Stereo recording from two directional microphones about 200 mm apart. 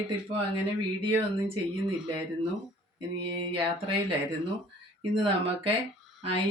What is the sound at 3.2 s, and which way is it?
Speech, 25° right (ahead or behind).